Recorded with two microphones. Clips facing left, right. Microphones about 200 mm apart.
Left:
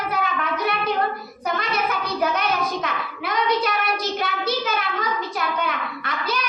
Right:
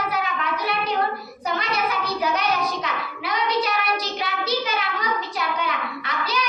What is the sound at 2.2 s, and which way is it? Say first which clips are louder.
Child singing: left 1 dB; 50° left (ahead or behind).